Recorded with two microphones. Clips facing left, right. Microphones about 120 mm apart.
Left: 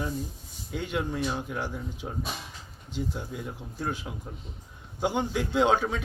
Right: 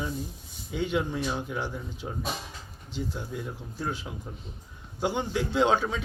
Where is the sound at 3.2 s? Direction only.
Centre (ahead or behind).